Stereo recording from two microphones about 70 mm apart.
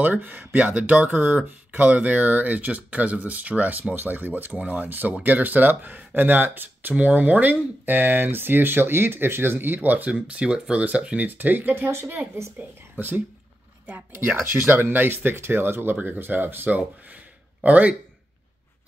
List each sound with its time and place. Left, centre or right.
0.0 s speech: right
12.5 s speech: right